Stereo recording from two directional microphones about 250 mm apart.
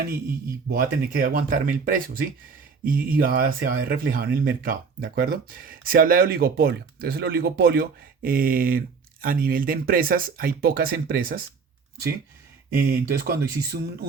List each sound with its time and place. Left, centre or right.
0.7 s speech: right
12.9 s speech: right